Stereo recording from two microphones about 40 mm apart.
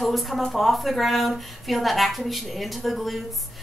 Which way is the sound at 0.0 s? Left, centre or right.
Centre.